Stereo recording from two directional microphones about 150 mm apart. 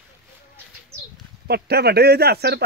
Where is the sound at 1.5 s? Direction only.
90° right.